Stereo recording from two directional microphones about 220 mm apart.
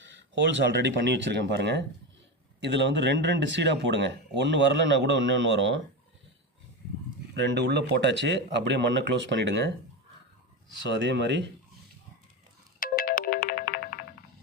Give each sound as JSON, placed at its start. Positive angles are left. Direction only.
{"t": 0.0, "sound": "speech", "side_deg": -55}
{"t": 7.3, "sound": "speech", "side_deg": -50}
{"t": 12.8, "sound": "ringtone", "side_deg": 40}